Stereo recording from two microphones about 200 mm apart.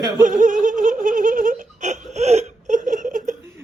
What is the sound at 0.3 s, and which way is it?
Laughter, 40° right (ahead or behind).